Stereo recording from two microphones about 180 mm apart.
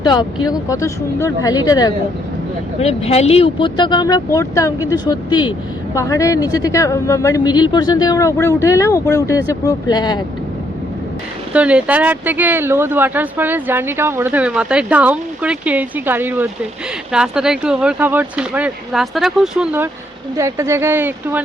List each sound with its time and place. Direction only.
0.0 s speech: 25° left (ahead or behind)
2.8 s speech: 35° left (ahead or behind)
11.5 s speech: 5° right (ahead or behind)